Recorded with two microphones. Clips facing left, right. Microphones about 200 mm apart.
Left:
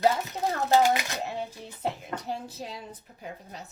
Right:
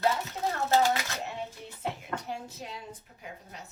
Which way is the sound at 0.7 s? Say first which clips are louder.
Left 3 dB; 15° left (ahead or behind).